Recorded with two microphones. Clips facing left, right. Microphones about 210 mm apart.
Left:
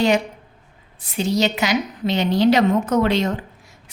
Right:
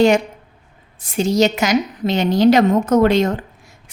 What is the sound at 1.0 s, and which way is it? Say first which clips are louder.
A woman's voice: right 4 dB; 45° right (ahead or behind).